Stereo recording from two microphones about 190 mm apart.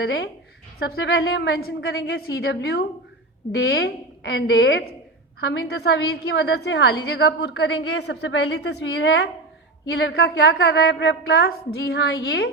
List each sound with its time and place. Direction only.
0.0 s a woman's voice: 60° left (ahead or behind)